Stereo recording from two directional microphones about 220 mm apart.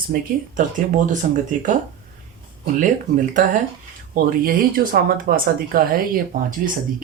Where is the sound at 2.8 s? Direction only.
35° right (ahead or behind).